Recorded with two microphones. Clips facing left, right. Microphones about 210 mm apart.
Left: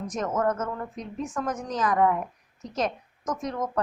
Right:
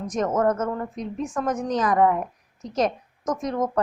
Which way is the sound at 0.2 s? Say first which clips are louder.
Right 5 dB; 35° right (ahead or behind).